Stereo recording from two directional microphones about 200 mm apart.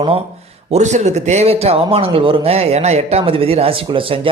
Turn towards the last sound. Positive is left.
turn(degrees=-25)  # may be behind; listen again after turning